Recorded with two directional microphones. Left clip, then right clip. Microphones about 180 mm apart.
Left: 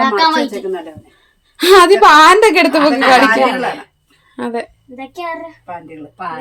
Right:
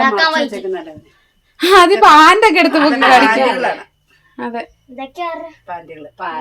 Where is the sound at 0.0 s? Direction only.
20° right (ahead or behind).